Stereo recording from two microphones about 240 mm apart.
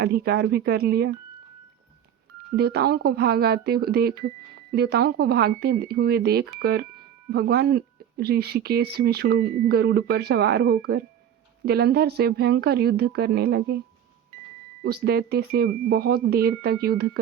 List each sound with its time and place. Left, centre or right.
0.0 s speech: right
2.6 s speech: right
14.8 s speech: right